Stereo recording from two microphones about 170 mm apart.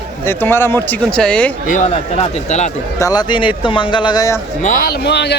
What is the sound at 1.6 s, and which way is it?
A man's voice, 45° left (ahead or behind).